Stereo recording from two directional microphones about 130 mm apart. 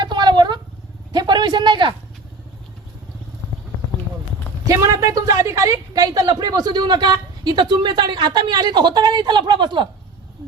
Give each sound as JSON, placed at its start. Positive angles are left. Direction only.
{"t": 0.0, "sound": "a sound", "side_deg": -35}
{"t": 1.1, "sound": "speech", "side_deg": -35}
{"t": 4.6, "sound": "speech", "side_deg": -25}